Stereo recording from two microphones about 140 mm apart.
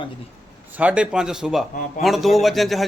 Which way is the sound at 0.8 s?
10° right (ahead or behind).